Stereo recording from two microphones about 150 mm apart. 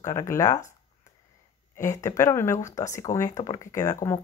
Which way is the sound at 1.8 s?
20° left (ahead or behind).